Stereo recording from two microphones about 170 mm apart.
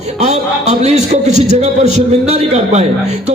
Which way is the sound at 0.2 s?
40° right (ahead or behind).